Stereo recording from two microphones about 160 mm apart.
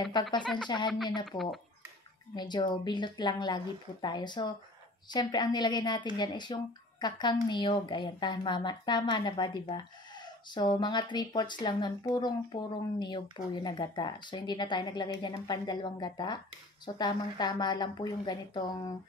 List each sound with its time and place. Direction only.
0.4 s speech: 5° left (ahead or behind)
0.7 s a woman's voice: 30° left (ahead or behind)
10.5 s a woman's voice: 30° left (ahead or behind)